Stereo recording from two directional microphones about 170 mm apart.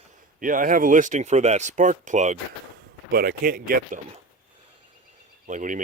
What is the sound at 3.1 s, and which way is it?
Speech, 60° right (ahead or behind).